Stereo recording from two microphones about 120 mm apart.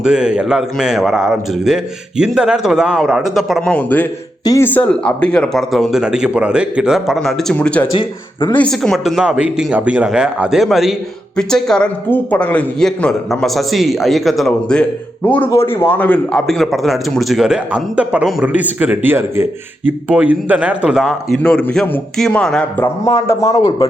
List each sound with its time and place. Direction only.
0.0 s a man's voice: 5° right (ahead or behind)
3.7 s a man's voice: 15° left (ahead or behind)
7.9 s speech: 40° left (ahead or behind)
8.5 s a man's voice: 5° left (ahead or behind)
23.0 s a man's voice: 25° left (ahead or behind)